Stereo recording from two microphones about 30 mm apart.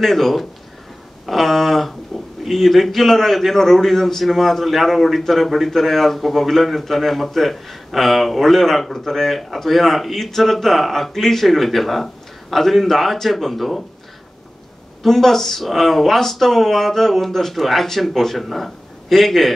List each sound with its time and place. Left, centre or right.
0.0 s a man's voice: centre
1.2 s a sound: centre
2.5 s a man's voice: centre
15.0 s a man's voice: centre